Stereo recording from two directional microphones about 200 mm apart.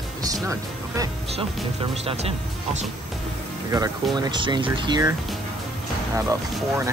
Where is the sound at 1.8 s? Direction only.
30° right (ahead or behind).